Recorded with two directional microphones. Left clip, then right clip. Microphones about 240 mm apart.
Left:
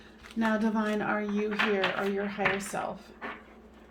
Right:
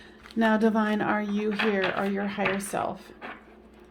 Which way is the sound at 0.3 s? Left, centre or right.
Right.